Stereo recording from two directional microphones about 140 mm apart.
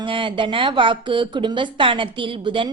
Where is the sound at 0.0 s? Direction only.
35° right (ahead or behind).